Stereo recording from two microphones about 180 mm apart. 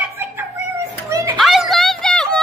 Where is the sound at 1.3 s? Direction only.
Centre (ahead or behind).